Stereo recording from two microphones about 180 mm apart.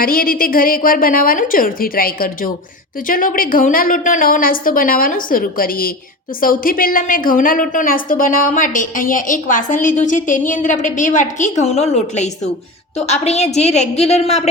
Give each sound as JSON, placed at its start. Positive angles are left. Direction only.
{"t": 0.0, "sound": "a woman's voice", "side_deg": 55}